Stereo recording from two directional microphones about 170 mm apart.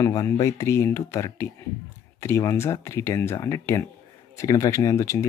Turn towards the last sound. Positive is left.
turn(degrees=20)  # may be behind; listen again after turning